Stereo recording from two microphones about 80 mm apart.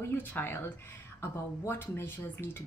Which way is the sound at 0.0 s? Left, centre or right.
Left.